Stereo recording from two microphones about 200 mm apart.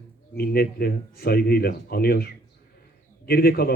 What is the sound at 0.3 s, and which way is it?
Speech, 50° left (ahead or behind).